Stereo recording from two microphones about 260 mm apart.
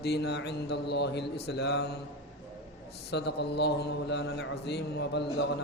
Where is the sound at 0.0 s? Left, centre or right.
Left.